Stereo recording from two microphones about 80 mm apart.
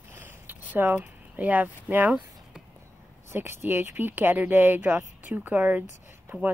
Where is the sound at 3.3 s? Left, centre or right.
Right.